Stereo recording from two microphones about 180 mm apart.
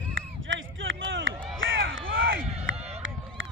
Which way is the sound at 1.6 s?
90° right.